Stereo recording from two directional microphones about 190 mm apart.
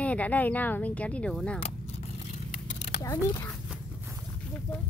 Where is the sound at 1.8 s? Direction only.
35° left (ahead or behind).